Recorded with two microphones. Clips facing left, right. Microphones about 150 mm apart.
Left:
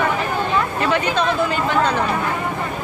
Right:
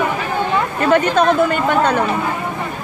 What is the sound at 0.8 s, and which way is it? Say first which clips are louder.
Speech: right 9 dB; 50° right (ahead or behind).